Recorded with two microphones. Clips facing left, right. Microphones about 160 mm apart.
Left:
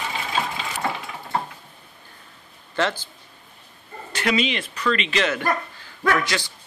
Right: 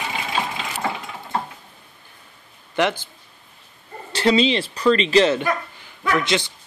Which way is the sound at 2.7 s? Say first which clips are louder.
Right 3 dB; 15° right (ahead or behind).